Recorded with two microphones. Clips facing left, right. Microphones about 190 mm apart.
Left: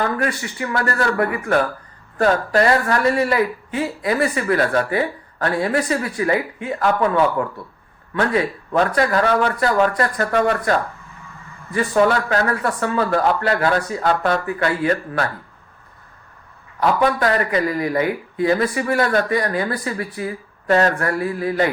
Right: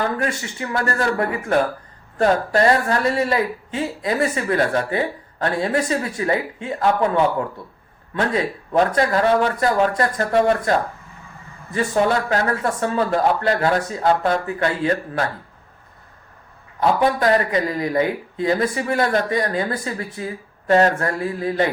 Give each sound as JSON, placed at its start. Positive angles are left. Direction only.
{"t": 0.2, "sound": "speech", "side_deg": -25}
{"t": 8.3, "sound": "speech", "side_deg": -25}
{"t": 17.0, "sound": "speech", "side_deg": -25}